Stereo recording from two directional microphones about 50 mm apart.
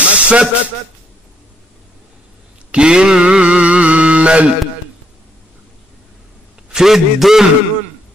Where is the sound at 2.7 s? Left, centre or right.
Centre.